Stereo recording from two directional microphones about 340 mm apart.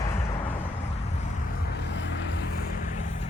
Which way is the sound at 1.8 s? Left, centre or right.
Left.